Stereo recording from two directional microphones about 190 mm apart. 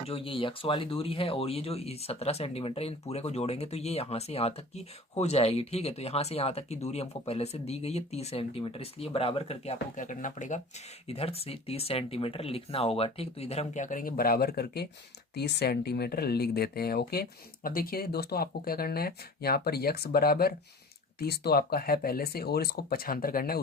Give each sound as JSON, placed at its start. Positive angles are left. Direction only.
{"t": 0.1, "sound": "speech", "side_deg": 30}
{"t": 9.9, "sound": "speech", "side_deg": 45}